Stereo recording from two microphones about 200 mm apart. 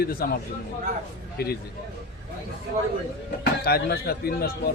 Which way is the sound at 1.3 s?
50° left (ahead or behind).